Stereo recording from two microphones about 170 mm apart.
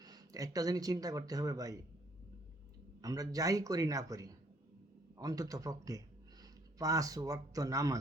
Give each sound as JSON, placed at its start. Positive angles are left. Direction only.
{"t": 0.0, "sound": "speech", "side_deg": -20}
{"t": 3.0, "sound": "a man's voice", "side_deg": -20}